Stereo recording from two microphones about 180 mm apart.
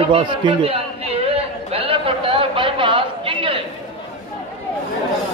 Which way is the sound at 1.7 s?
30° right (ahead or behind).